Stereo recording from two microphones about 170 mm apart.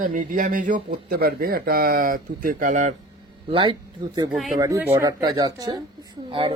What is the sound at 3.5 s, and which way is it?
Speech, 30° right (ahead or behind).